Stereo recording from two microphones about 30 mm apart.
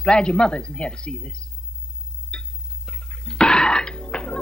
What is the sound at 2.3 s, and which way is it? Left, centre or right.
Clock, left.